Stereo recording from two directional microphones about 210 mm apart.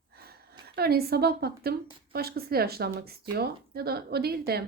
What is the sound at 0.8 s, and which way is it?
Speech, 50° right (ahead or behind).